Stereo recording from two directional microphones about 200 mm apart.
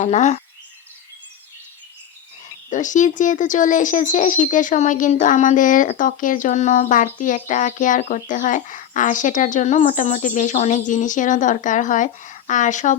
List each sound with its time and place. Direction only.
0.0 s speech: 35° left (ahead or behind)
2.6 s speech: 40° left (ahead or behind)